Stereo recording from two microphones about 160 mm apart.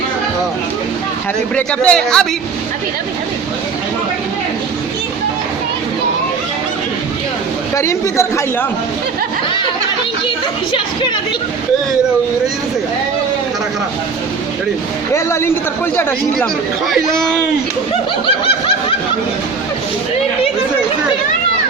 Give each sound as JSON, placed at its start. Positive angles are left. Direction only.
{"t": 1.5, "sound": "speech", "side_deg": 5}
{"t": 7.8, "sound": "speech", "side_deg": 20}
{"t": 10.2, "sound": "speech", "side_deg": 30}
{"t": 15.1, "sound": "speech", "side_deg": 15}